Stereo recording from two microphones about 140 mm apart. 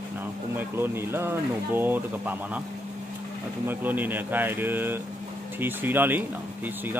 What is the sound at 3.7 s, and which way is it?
Speech, 15° right (ahead or behind).